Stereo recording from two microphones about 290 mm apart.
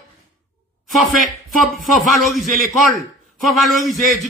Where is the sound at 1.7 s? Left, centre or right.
Centre.